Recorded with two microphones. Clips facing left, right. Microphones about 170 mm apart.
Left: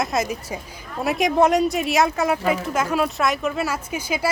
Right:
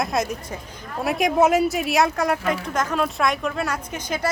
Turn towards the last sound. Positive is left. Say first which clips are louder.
# left 2 dB
turn(degrees=10)  # may be behind; listen again after turning